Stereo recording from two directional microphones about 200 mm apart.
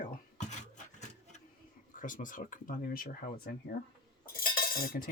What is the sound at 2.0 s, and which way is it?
Speech, 40° left (ahead or behind).